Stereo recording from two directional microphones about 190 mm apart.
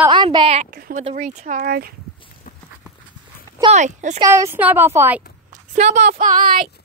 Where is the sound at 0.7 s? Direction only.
50° right (ahead or behind).